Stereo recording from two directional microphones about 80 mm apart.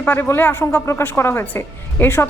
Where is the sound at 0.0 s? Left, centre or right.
Left.